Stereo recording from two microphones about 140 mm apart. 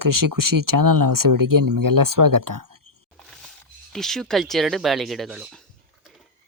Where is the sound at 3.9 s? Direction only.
5° left (ahead or behind).